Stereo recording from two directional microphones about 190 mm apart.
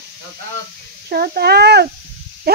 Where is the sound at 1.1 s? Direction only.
55° right (ahead or behind).